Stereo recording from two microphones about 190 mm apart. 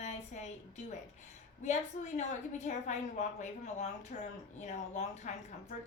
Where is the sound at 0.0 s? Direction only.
35° left (ahead or behind).